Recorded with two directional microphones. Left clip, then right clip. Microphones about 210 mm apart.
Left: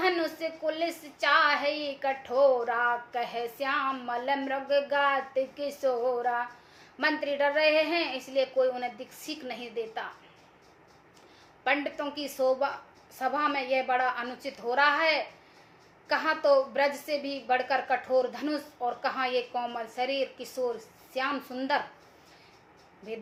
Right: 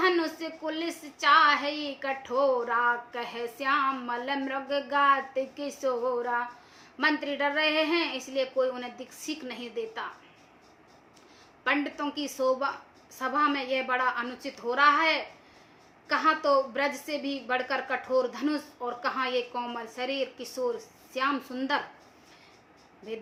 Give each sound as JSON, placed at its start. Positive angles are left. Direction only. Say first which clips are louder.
{"t": 0.0, "sound": "a woman's voice", "louder": "right 1 dB", "side_deg": -20}
{"t": 11.6, "sound": "a woman's voice", "louder": "even", "side_deg": -15}